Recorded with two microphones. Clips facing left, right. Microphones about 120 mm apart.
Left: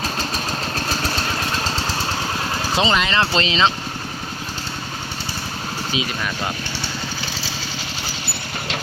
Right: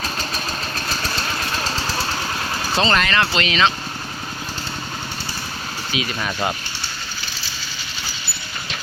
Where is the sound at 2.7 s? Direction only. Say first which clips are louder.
Even; 15° left (ahead or behind).